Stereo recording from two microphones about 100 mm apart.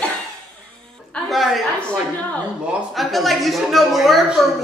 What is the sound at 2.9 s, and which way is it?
A woman's voice, centre (ahead or behind).